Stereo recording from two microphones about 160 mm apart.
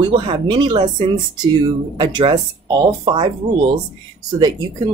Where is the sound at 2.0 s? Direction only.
30° right (ahead or behind).